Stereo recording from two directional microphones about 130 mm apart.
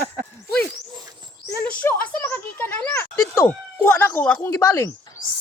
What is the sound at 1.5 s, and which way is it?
A woman's voice, 15° left (ahead or behind).